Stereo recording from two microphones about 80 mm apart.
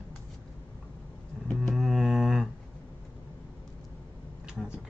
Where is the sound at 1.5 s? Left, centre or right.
Centre.